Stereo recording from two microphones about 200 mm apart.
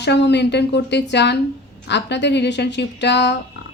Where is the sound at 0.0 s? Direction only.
60° left (ahead or behind).